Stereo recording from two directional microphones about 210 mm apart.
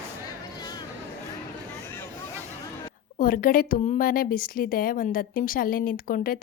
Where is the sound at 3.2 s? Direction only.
40° left (ahead or behind).